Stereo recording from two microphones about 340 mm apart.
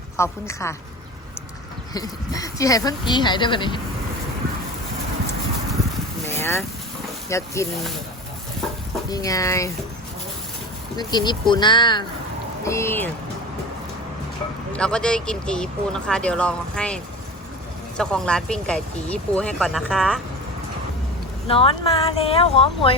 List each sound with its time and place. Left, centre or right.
0.2 s speech: centre
1.9 s speech: centre
6.2 s boat: centre
7.3 s speech: centre
9.0 s speech: centre
10.9 s speech: centre
14.7 s speech: centre
21.4 s speech: centre